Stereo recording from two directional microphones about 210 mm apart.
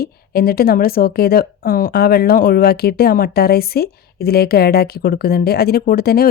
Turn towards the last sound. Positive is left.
turn(degrees=45)  # may be behind; listen again after turning